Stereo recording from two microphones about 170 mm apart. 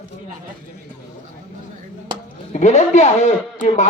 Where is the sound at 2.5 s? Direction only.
45° left (ahead or behind).